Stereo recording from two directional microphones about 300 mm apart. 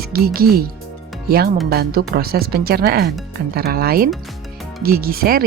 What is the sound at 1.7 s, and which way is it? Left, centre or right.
Speech, right.